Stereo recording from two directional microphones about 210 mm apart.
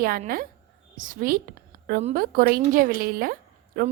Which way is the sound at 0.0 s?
45° right (ahead or behind).